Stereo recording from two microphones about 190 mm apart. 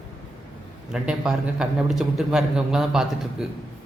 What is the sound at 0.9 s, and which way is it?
A man's voice, 5° right (ahead or behind).